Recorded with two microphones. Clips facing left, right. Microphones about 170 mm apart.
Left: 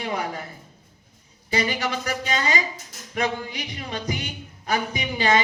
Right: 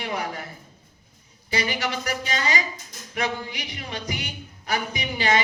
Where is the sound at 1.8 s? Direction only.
30° left (ahead or behind).